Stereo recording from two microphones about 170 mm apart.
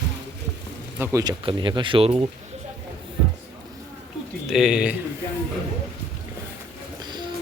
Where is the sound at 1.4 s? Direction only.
30° right (ahead or behind).